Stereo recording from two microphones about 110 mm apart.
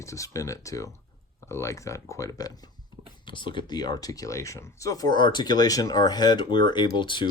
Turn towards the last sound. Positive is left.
turn(degrees=45)  # may be behind; listen again after turning